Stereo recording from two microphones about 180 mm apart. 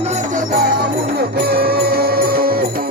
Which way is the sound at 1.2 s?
60° right (ahead or behind).